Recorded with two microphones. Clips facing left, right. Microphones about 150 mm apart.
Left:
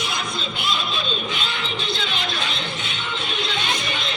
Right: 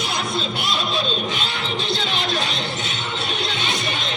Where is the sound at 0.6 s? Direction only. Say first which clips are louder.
Left 1 dB; 40° right (ahead or behind).